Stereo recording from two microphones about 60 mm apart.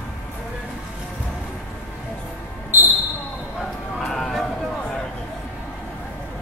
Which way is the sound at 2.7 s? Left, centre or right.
Right.